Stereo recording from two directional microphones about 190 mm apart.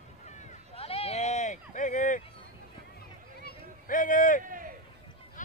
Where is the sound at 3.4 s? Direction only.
45° left (ahead or behind).